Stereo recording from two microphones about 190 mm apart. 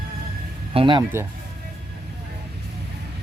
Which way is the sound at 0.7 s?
25° right (ahead or behind).